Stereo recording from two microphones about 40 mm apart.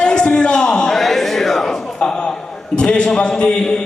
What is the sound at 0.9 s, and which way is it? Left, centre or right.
Music, centre.